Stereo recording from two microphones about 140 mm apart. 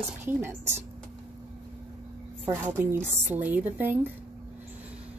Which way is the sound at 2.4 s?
15° right (ahead or behind).